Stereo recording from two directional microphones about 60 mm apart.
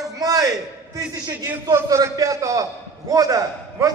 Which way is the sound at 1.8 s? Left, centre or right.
Right.